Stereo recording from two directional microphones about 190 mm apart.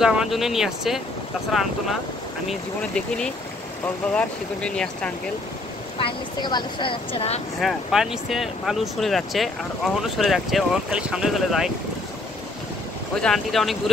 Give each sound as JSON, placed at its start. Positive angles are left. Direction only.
{"t": 0.0, "sound": "speech", "side_deg": -5}
{"t": 5.9, "sound": "speech", "side_deg": 25}
{"t": 7.6, "sound": "speech", "side_deg": 0}
{"t": 13.1, "sound": "speech", "side_deg": 0}